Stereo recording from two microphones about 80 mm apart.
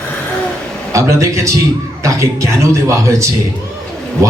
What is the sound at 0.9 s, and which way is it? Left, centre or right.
A man's voice, right.